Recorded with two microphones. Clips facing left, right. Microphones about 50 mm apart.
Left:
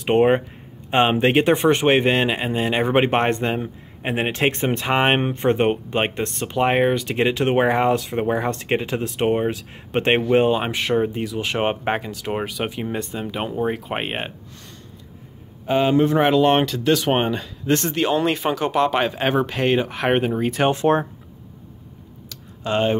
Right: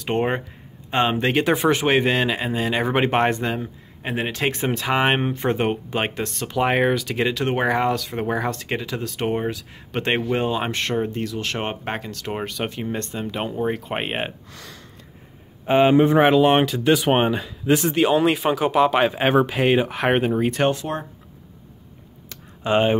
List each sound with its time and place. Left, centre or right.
0.0 s speech: centre
1.5 s speech: centre
1.9 s speech: centre
8.2 s speech: centre
8.6 s speech: left
9.0 s speech: centre
9.5 s speech: left
10.6 s speech: centre
15.6 s speech: right; by 20.6 s centre
20.7 s speech: left
22.6 s speech: centre